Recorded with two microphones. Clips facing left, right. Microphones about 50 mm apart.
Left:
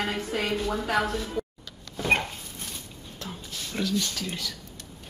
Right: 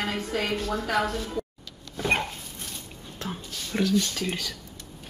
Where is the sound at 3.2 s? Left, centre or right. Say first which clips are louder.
Right 3 dB; right.